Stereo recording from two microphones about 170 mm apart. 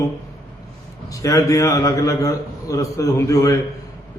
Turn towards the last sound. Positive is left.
turn(degrees=20)  # may be behind; listen again after turning